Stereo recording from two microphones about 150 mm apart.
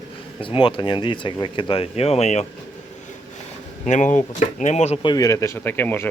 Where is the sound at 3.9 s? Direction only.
55° left (ahead or behind).